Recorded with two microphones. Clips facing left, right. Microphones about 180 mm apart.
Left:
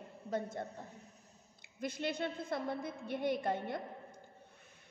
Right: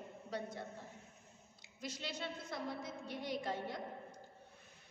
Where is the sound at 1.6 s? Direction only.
55° left (ahead or behind).